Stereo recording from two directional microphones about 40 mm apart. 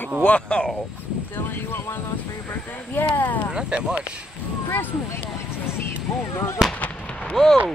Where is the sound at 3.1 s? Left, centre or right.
Left.